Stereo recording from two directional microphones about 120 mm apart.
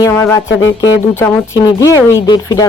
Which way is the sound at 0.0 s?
25° left (ahead or behind).